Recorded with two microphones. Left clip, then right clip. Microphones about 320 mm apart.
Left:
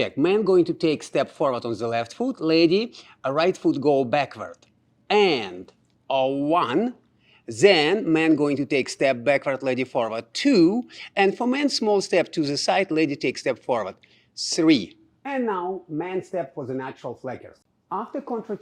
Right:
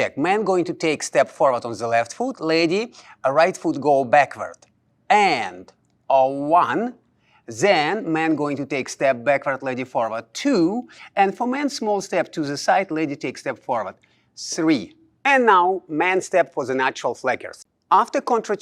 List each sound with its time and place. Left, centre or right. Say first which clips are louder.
0.0 s speech: right 1 dB; right
15.2 s speech: right 12 dB; centre